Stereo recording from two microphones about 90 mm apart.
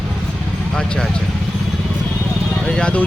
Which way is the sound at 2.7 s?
10° left (ahead or behind).